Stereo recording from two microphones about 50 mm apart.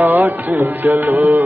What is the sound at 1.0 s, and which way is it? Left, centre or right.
Music, right.